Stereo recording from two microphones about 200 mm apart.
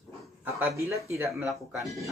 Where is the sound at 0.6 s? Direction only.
15° right (ahead or behind).